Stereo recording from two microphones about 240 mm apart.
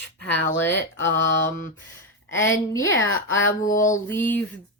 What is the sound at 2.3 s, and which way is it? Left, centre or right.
Speech, centre.